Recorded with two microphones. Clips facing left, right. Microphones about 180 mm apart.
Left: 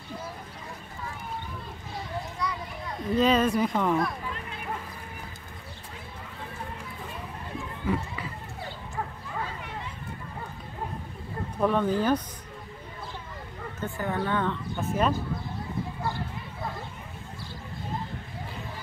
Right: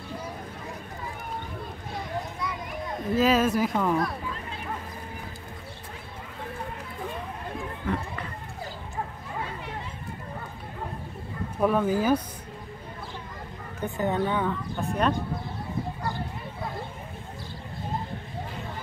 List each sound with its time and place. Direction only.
2.4 s a sound: 20° right (ahead or behind)
3.2 s speech: 5° right (ahead or behind)
7.8 s run: 5° left (ahead or behind)
11.6 s speech: 5° right (ahead or behind)
13.7 s speech: 20° right (ahead or behind)
14.4 s speech: centre (ahead or behind)